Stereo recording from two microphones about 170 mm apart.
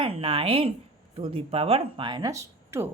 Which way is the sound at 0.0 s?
35° right (ahead or behind).